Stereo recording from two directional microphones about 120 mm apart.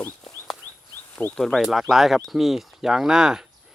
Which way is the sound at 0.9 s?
15° left (ahead or behind).